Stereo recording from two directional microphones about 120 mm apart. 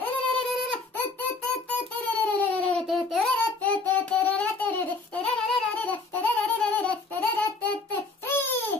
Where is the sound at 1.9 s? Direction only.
10° left (ahead or behind).